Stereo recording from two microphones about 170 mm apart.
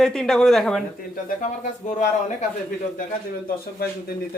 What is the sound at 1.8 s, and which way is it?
Speech, 40° left (ahead or behind).